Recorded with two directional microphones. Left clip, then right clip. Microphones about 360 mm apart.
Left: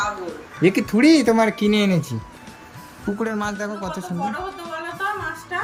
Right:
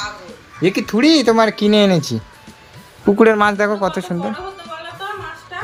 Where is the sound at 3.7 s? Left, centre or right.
Right.